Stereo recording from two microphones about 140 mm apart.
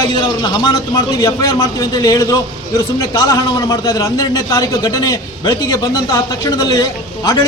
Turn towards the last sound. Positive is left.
turn(degrees=25)  # may be behind; listen again after turning